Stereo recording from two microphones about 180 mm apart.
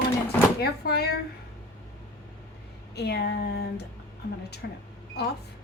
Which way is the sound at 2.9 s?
65° left (ahead or behind).